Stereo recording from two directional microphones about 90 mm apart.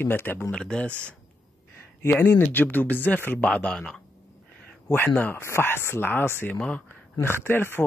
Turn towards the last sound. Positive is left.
turn(degrees=25)  # may be behind; listen again after turning